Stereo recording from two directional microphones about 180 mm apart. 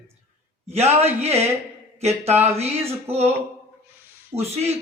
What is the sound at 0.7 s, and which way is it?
Speech, 35° right (ahead or behind).